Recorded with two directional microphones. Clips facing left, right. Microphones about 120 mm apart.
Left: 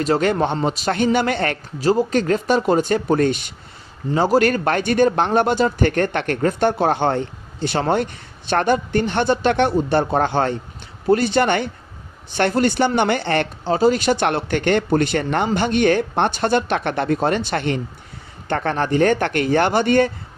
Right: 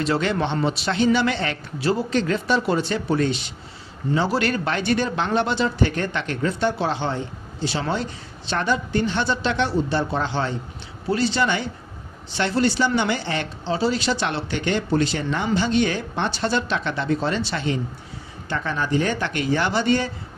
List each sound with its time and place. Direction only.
0.0 s a man's voice: 45° left (ahead or behind)